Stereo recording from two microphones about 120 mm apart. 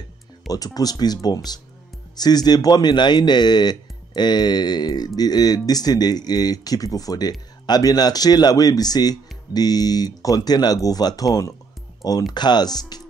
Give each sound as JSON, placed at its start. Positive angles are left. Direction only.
{"t": 0.5, "sound": "speech", "side_deg": 30}